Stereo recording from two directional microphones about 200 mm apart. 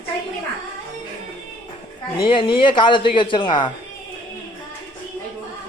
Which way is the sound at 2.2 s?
25° left (ahead or behind).